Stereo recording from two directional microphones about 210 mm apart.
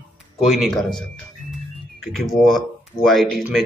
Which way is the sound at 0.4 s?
Centre (ahead or behind).